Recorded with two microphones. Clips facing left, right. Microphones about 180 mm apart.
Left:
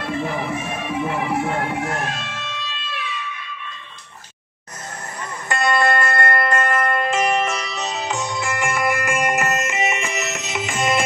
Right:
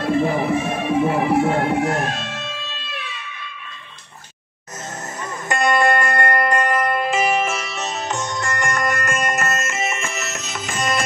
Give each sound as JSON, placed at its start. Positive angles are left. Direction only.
{"t": 0.0, "sound": "music", "side_deg": -25}
{"t": 0.7, "sound": "speech", "side_deg": -35}
{"t": 5.5, "sound": "music", "side_deg": -20}